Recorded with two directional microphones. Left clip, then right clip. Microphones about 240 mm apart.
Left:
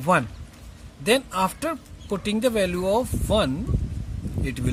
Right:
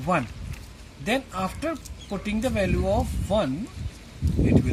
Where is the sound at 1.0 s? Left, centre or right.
Left.